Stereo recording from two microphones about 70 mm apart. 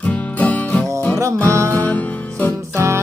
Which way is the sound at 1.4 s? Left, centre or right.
Right.